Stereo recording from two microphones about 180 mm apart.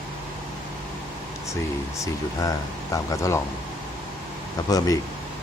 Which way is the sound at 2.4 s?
20° left (ahead or behind).